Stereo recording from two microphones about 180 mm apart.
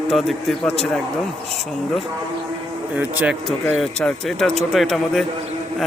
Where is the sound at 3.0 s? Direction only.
10° right (ahead or behind).